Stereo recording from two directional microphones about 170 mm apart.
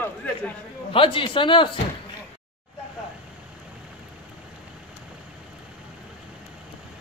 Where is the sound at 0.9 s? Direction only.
30° left (ahead or behind).